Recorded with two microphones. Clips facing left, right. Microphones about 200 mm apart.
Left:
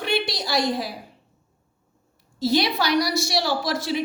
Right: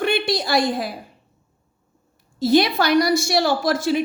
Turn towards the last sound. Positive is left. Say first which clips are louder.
# right 5 dB
turn(degrees=-50)  # may be behind; listen again after turning